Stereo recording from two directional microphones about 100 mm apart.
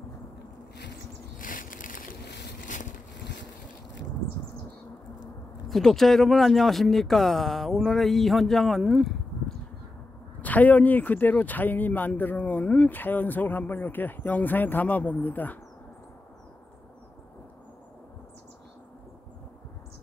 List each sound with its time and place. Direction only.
5.7 s speech: 5° left (ahead or behind)
10.4 s speech: 15° left (ahead or behind)